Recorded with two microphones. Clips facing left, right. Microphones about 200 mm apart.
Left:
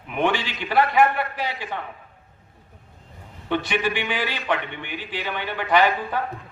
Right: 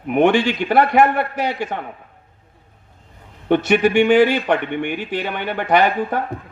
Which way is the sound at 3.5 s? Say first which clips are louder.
Right 9 dB; 50° right (ahead or behind).